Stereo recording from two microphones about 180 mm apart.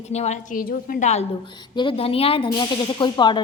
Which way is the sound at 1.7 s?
25° left (ahead or behind).